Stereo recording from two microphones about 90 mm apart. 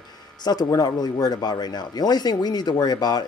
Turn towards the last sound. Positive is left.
turn(degrees=45)  # may be behind; listen again after turning